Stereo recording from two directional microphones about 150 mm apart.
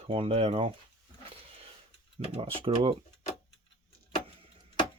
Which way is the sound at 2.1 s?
40° right (ahead or behind).